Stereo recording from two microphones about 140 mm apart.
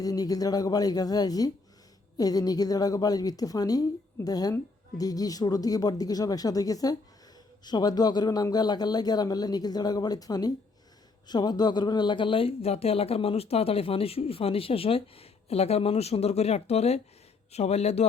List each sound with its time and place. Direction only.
0.0 s a woman's voice: 25° left (ahead or behind); by 18.0 s 50° left (ahead or behind)